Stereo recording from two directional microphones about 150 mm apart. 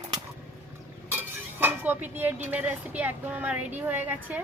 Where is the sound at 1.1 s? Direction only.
15° right (ahead or behind).